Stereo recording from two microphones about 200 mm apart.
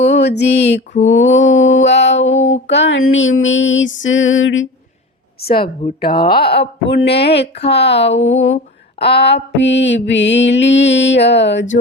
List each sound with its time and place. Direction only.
0.0 s a sound: 60° left (ahead or behind)
1.0 s mantra: 70° left (ahead or behind)
6.2 s mantra: 50° left (ahead or behind); by 8.5 s 70° left (ahead or behind)
9.0 s mantra: 55° left (ahead or behind)